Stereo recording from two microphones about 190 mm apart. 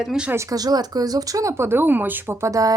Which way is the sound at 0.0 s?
5° right (ahead or behind).